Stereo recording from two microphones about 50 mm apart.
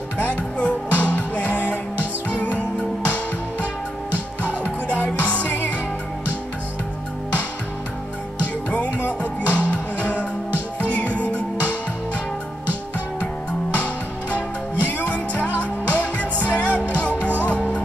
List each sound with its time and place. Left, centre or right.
0.2 s music: left
4.8 s music: left
8.6 s music: left
14.8 s music: left